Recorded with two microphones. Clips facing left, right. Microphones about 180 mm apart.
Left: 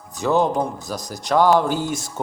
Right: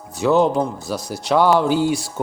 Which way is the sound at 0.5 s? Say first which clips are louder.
Right 2 dB; 15° left (ahead or behind).